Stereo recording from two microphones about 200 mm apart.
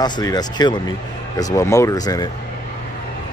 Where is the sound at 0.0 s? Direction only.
20° left (ahead or behind).